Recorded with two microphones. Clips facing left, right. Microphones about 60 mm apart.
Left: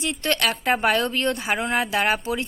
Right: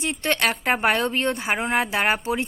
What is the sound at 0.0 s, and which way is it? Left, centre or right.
A woman's voice, right.